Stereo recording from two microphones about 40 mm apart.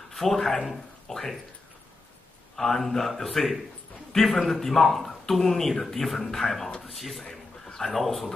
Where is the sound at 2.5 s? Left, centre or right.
Centre.